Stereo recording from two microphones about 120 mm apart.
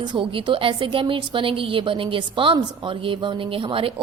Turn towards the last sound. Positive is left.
turn(degrees=-45)  # may be behind; listen again after turning